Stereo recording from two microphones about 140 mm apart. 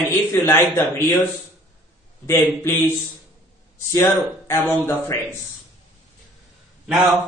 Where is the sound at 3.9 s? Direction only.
20° left (ahead or behind).